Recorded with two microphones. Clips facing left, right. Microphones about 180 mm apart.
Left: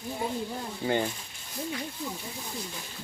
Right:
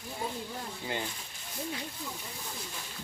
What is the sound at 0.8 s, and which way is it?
Speech, 50° left (ahead or behind).